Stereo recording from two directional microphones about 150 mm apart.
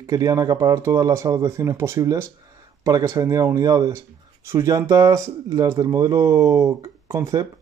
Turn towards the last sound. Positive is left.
turn(degrees=-20)  # may be behind; listen again after turning